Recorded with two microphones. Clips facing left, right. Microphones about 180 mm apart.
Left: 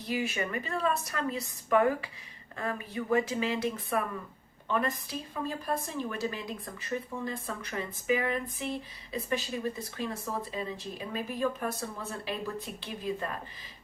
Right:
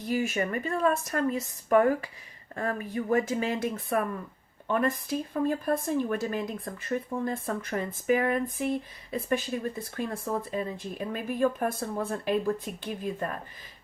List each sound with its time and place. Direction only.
0.1 s speech: 45° right (ahead or behind)